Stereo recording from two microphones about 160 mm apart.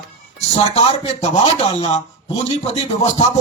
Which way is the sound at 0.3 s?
40° left (ahead or behind).